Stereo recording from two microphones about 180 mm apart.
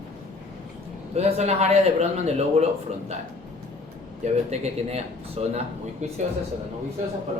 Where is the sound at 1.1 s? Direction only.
40° right (ahead or behind).